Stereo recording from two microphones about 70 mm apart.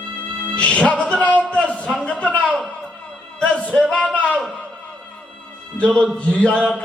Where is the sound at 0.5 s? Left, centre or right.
Centre.